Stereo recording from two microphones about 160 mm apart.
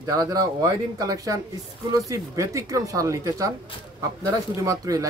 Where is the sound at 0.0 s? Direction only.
25° right (ahead or behind).